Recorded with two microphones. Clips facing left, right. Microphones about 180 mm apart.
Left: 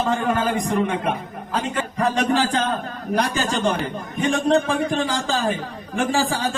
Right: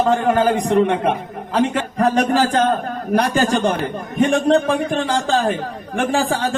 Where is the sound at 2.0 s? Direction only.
45° right (ahead or behind).